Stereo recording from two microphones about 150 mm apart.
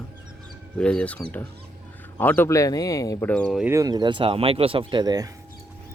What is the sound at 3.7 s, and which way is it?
Speech, 25° right (ahead or behind).